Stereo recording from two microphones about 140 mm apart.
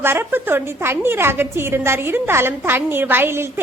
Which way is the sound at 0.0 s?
15° right (ahead or behind).